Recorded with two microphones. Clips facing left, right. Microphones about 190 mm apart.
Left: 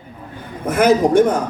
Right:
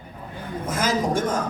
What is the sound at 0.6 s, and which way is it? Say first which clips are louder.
Speech: left 10 dB; 60° left (ahead or behind).